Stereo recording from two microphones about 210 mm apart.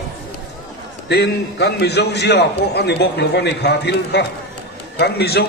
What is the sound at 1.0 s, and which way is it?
A man's voice, 55° left (ahead or behind).